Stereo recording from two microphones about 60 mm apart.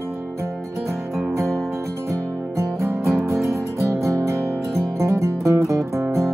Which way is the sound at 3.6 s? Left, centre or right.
Right.